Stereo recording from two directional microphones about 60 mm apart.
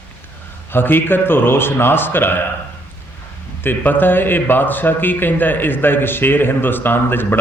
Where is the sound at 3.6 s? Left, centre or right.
Left.